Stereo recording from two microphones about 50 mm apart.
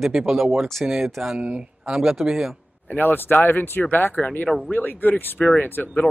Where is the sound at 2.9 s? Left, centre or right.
Left.